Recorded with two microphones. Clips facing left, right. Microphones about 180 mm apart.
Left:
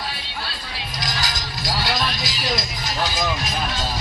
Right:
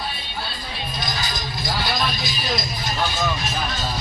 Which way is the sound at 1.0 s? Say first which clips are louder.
Left 2 dB; 90° left.